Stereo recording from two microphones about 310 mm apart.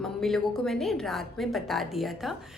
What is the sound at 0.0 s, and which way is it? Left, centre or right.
A woman's voice, centre.